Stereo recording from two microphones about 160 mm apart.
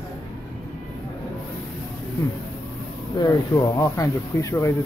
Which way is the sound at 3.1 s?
20° left (ahead or behind).